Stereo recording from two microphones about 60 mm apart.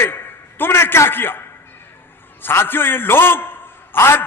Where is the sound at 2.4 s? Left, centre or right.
Left.